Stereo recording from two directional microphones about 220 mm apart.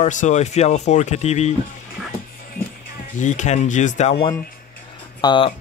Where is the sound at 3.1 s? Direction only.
35° left (ahead or behind).